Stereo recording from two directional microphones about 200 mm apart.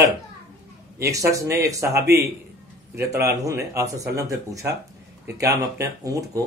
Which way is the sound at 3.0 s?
15° right (ahead or behind).